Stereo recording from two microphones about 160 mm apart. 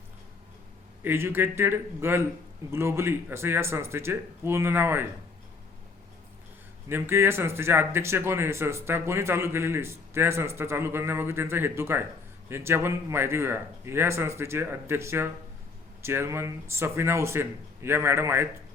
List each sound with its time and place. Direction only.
1.0 s speech: 15° right (ahead or behind)
6.8 s speech: 15° right (ahead or behind)